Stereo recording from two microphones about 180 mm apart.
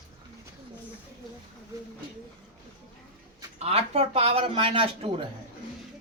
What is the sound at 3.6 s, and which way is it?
Speech, 35° right (ahead or behind).